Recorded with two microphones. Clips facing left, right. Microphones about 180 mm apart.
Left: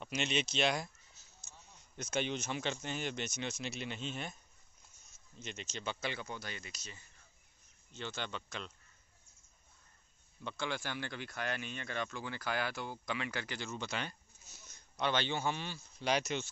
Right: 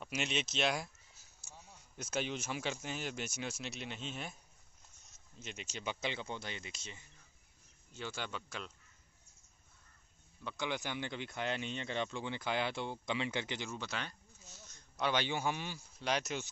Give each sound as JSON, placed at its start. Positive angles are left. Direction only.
{"t": 0.0, "sound": "speech", "side_deg": -5}
{"t": 2.0, "sound": "speech", "side_deg": -5}
{"t": 5.4, "sound": "speech", "side_deg": -5}
{"t": 7.9, "sound": "speech", "side_deg": -10}
{"t": 10.6, "sound": "speech", "side_deg": -15}
{"t": 13.7, "sound": "speech", "side_deg": 0}
{"t": 14.5, "sound": "a sound", "side_deg": 10}
{"t": 15.0, "sound": "speech", "side_deg": -10}
{"t": 16.0, "sound": "speech", "side_deg": 0}